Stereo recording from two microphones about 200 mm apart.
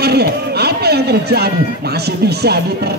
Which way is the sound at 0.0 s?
55° right (ahead or behind).